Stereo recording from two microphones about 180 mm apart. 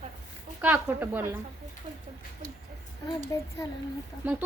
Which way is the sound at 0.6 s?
10° right (ahead or behind).